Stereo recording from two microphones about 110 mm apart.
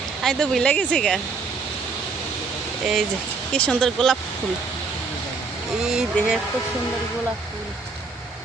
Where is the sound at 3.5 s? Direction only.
10° left (ahead or behind).